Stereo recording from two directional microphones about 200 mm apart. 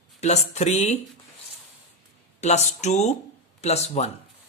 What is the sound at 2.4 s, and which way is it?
Speech, 35° left (ahead or behind).